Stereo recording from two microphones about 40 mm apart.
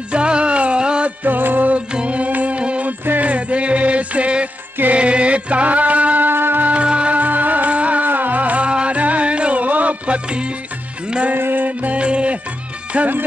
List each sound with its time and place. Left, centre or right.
0.1 s music: right
1.2 s music: right
1.9 s music: right
6.2 s music: right
6.6 s music: right
7.2 s music: right
8.1 s music: right
8.6 s music: right
11.3 s music: right
12.0 s music: right
12.9 s speech: right